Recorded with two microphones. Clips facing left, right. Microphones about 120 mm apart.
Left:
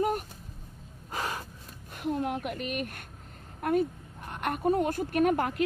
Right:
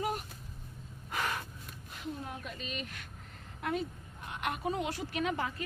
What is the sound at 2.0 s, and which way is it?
Speech, 70° left (ahead or behind).